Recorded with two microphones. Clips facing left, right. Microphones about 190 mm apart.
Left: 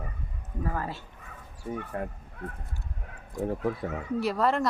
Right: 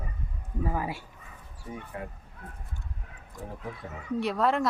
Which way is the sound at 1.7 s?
50° left (ahead or behind).